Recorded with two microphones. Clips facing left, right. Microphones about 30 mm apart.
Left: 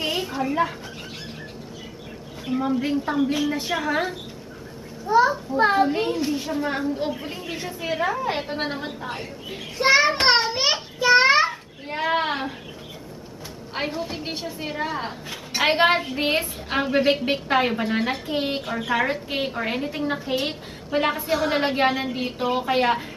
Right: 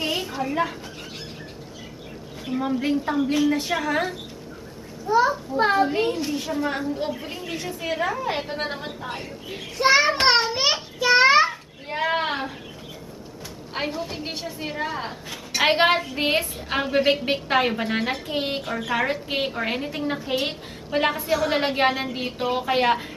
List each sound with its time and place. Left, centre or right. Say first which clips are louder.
0.0 s a sound: left 1 dB; centre
2.7 s a woman's voice: right 2 dB; centre
13.7 s a woman's voice: even; centre
19.2 s a woman's voice: right 1 dB; centre
21.1 s a woman's voice: even; centre
21.5 s a woman's voice: left 1 dB; centre